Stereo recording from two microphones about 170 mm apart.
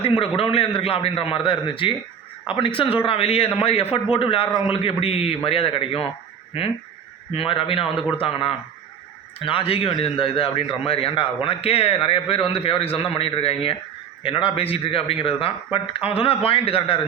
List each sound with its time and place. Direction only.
0.0 s a man's voice: 30° left (ahead or behind)
7.3 s a man's voice: 35° left (ahead or behind)